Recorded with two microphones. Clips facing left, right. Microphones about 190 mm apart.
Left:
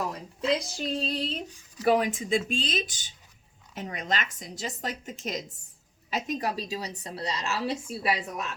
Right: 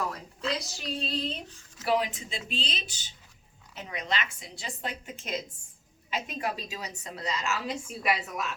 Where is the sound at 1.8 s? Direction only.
50° left (ahead or behind).